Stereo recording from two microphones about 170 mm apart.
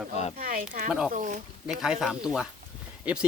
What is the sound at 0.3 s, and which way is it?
Speech, 55° right (ahead or behind).